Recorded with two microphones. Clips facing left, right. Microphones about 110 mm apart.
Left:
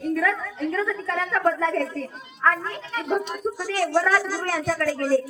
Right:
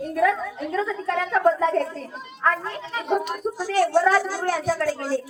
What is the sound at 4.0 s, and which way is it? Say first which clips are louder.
A woman's voice: right 3 dB; 15° right (ahead or behind).